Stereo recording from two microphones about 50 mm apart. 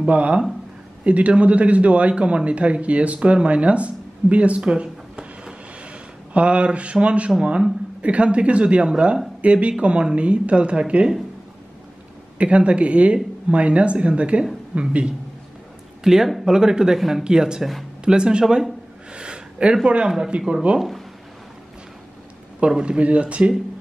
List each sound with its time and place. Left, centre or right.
0.0 s a man's voice: right
12.4 s a man's voice: right
16.0 s a man's voice: centre
18.4 s speech: centre
19.1 s a sound: centre
20.1 s a man's voice: centre
22.7 s a man's voice: centre